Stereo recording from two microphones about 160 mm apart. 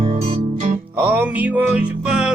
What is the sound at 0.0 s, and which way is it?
Music, 35° right (ahead or behind).